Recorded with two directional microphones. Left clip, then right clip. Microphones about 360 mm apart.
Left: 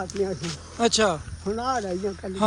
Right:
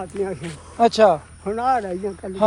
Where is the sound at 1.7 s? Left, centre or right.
Right.